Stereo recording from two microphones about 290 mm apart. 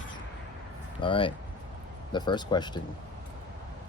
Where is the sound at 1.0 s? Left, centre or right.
Centre.